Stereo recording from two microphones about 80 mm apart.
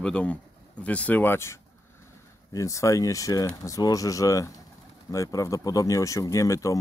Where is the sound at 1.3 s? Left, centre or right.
Left.